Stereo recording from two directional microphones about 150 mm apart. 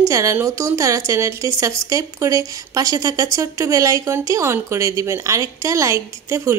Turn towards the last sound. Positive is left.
turn(degrees=-20)  # may be behind; listen again after turning